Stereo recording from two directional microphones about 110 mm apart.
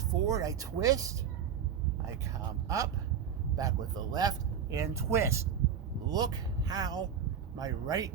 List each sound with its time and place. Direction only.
0.0 s speech: 30° right (ahead or behind)
2.2 s speech: 30° right (ahead or behind)
6.1 s speech: 40° right (ahead or behind)